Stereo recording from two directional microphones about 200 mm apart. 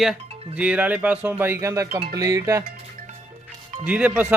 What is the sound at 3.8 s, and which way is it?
Speech, 5° right (ahead or behind).